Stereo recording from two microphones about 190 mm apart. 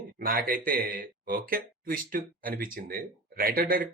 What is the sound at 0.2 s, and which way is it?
Speech, 50° right (ahead or behind).